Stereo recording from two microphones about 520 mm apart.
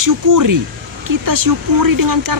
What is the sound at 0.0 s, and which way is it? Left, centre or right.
Speech, right.